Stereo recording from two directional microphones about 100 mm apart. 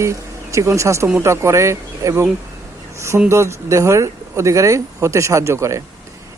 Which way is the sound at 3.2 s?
30° right (ahead or behind).